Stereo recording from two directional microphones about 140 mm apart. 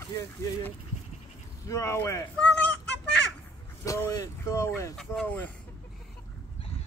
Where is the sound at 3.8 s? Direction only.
20° left (ahead or behind).